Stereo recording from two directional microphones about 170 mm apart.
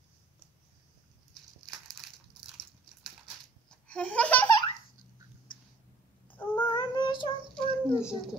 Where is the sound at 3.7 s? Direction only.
5° left (ahead or behind).